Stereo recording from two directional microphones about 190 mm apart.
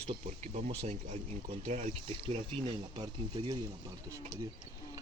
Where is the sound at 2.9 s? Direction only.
25° right (ahead or behind).